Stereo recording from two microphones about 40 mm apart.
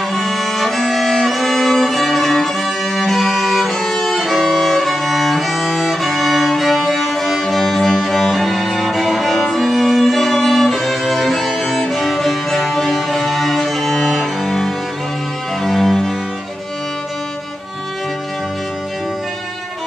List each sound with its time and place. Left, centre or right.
0.1 s music: centre